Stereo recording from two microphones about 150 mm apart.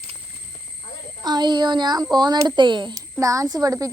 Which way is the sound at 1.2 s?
30° right (ahead or behind).